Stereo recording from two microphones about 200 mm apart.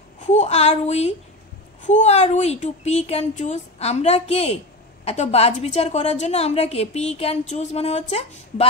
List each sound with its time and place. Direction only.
0.3 s a woman's voice: 35° left (ahead or behind)